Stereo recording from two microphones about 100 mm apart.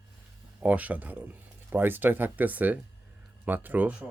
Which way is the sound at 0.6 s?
15° right (ahead or behind).